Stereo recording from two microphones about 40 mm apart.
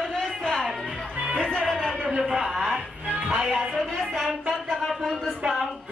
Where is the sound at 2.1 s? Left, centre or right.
Centre.